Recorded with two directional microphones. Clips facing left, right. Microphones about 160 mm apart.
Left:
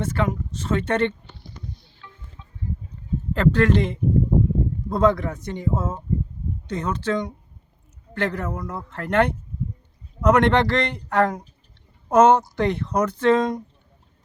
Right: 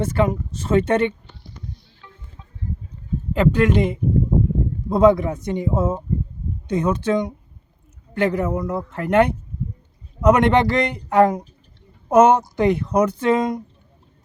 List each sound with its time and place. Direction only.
0.0 s speech: 10° right (ahead or behind)
3.3 s speech: 15° right (ahead or behind)